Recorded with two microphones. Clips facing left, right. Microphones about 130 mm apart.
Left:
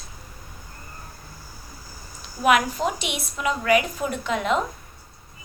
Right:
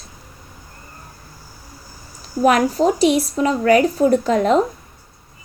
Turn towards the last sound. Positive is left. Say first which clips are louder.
# right 8 dB
turn(degrees=-35)  # may be behind; listen again after turning